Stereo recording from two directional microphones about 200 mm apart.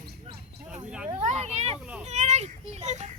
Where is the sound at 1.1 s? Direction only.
35° right (ahead or behind).